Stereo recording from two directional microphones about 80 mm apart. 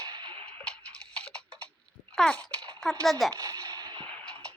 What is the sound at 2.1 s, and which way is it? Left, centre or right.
Babbling, centre.